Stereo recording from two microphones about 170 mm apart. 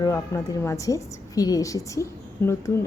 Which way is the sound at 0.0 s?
20° left (ahead or behind).